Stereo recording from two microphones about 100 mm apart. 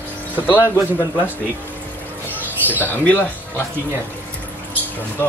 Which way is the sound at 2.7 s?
15° left (ahead or behind).